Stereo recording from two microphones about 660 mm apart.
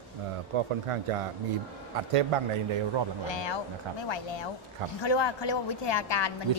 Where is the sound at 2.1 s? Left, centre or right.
Right.